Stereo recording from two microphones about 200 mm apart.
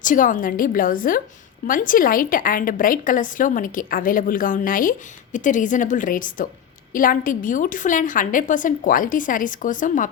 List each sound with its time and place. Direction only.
0.0 s a woman's voice: 40° left (ahead or behind)